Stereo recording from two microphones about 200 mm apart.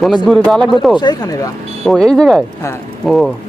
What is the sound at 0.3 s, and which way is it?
Speech, 5° left (ahead or behind).